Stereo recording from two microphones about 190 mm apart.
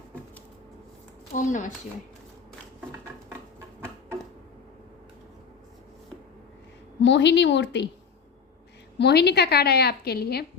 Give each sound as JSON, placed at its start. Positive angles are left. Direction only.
{"t": 1.3, "sound": "a woman's voice", "side_deg": 40}
{"t": 7.0, "sound": "a woman's voice", "side_deg": 70}
{"t": 9.0, "sound": "a woman's voice", "side_deg": 60}